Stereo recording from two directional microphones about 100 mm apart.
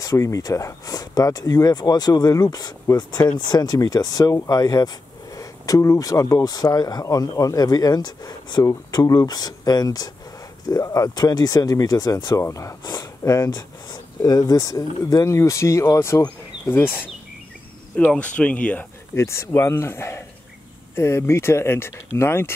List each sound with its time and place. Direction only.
0.0 s speech: 35° left (ahead or behind); by 18.9 s 15° left (ahead or behind)
19.1 s speech: 25° left (ahead or behind)